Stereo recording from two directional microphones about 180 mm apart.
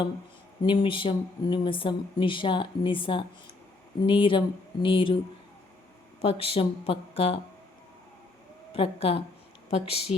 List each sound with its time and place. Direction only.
0.6 s speech: 30° left (ahead or behind)
6.2 s speech: 35° left (ahead or behind)
8.7 s speech: 30° left (ahead or behind)